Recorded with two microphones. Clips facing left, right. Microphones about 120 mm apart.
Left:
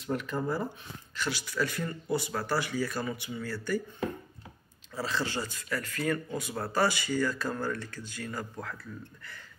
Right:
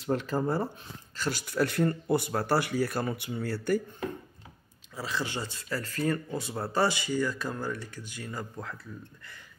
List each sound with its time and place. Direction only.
0.0 s speech: 30° right (ahead or behind)
1.1 s speech: 45° right (ahead or behind)
4.9 s speech: 15° right (ahead or behind)